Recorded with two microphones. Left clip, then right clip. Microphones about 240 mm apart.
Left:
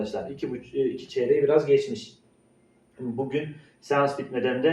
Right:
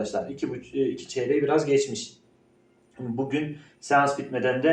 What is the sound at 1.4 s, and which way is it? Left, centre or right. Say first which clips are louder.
Speech: left 1 dB; right.